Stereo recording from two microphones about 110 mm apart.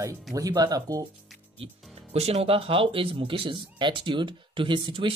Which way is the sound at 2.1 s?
70° right (ahead or behind).